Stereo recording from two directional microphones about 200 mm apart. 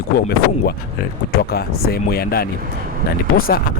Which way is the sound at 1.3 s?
50° left (ahead or behind).